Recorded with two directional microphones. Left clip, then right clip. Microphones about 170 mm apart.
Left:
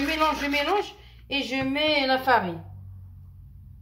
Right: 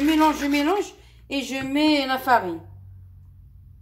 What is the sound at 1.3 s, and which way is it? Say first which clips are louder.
Speech: left 1 dB; 40° right (ahead or behind).